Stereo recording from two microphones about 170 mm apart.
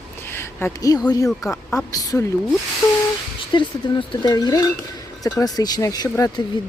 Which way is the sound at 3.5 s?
30° left (ahead or behind).